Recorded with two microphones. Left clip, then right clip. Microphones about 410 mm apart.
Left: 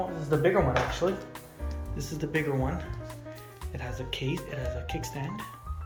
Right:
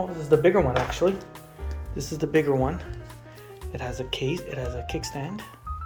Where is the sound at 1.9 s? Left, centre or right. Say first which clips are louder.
Right 8 dB; centre.